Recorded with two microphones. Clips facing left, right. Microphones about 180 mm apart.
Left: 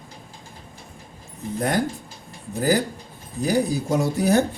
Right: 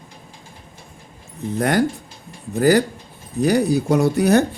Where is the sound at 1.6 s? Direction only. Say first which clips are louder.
Right 5 dB; 75° right (ahead or behind).